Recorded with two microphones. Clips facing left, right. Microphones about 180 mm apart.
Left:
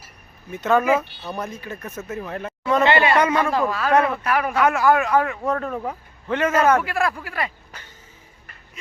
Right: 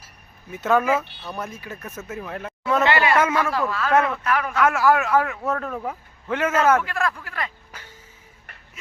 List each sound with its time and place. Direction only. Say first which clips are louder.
0.5 s speech: left 1 dB; 5° right (ahead or behind)
0.9 s speech: left 3 dB; 15° left (ahead or behind)
1.4 s speech: left 2 dB; 5° right (ahead or behind)
2.8 s speech: left 2 dB; 25° left (ahead or behind)
4.6 s a man's voice: even; centre (ahead or behind)
6.7 s speech: left 2 dB; 10° left (ahead or behind)
7.7 s a sound: even; 10° right (ahead or behind)